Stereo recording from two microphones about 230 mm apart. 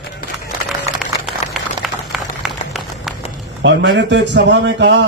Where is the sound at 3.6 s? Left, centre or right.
Right.